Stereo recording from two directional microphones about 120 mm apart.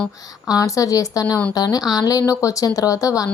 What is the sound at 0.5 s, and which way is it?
Speech, 30° left (ahead or behind).